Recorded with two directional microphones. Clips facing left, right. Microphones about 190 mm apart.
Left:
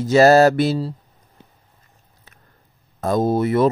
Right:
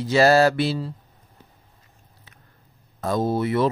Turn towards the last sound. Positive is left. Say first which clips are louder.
# left 4 dB
turn(degrees=45)  # may be behind; listen again after turning